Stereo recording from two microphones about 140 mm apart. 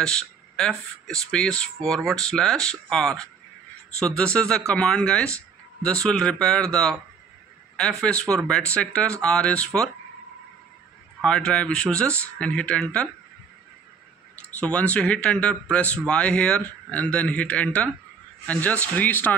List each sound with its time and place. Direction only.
0.0 s speech: 5° left (ahead or behind)
11.2 s speech: 5° left (ahead or behind)
14.6 s speech: 10° left (ahead or behind)